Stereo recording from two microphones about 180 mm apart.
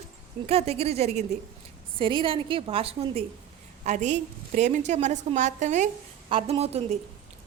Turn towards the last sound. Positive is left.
turn(degrees=-35)  # may be behind; listen again after turning